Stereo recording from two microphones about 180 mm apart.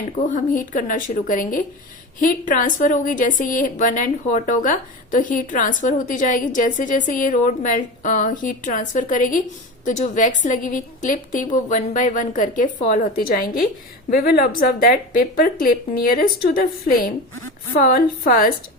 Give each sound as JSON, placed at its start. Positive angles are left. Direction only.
{"t": 0.3, "sound": "a woman's voice", "side_deg": 50}